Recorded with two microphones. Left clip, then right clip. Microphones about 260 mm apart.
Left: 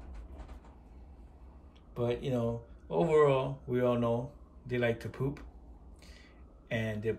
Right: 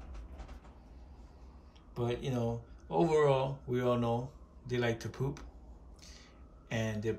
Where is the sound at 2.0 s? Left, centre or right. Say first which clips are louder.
Left 3 dB; centre.